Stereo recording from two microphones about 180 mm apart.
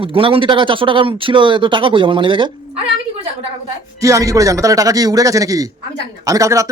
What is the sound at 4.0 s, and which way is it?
Speech, 20° right (ahead or behind).